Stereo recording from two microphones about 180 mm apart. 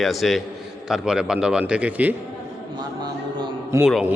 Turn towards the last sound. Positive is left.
turn(degrees=-5)  # may be behind; listen again after turning